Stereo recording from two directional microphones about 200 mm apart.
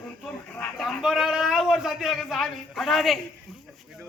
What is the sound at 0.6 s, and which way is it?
A man's voice, centre (ahead or behind).